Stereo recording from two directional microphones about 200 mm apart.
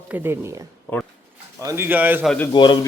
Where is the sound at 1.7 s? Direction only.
10° right (ahead or behind).